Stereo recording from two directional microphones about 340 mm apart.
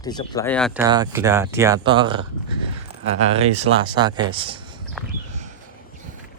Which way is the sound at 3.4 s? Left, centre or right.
Centre.